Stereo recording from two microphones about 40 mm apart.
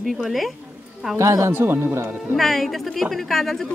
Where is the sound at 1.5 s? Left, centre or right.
Right.